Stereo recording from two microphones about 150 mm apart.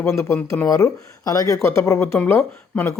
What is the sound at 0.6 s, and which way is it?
Speech, 25° left (ahead or behind).